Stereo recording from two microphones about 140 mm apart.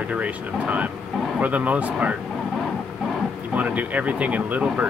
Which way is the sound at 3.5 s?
10° right (ahead or behind).